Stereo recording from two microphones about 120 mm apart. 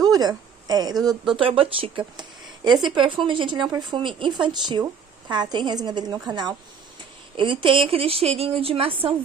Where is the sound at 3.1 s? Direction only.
45° right (ahead or behind).